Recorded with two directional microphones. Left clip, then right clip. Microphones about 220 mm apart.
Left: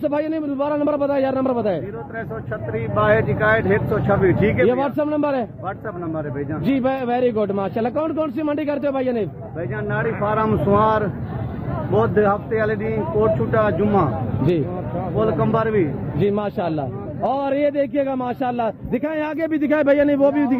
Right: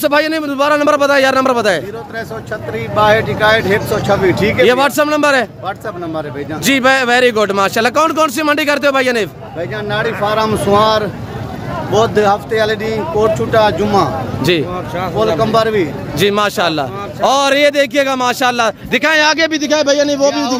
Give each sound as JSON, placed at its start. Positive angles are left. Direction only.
{"t": 0.0, "sound": "a man's voice", "side_deg": -10}
{"t": 3.0, "sound": "a man's voice", "side_deg": -5}